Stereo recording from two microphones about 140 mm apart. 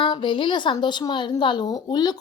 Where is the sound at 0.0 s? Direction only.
35° left (ahead or behind).